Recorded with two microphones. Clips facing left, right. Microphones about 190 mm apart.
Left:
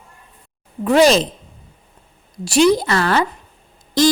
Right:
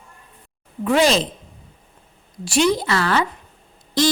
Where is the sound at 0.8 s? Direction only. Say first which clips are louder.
Left 4 dB; 40° left (ahead or behind).